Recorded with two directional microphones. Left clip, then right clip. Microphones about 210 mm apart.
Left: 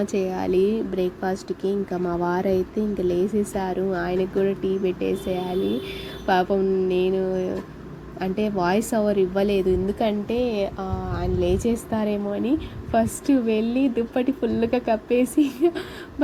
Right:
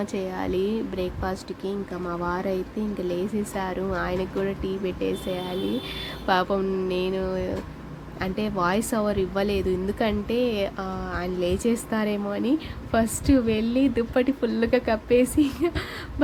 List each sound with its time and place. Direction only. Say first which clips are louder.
0.0 s a woman's voice: left 4 dB; 5° left (ahead or behind)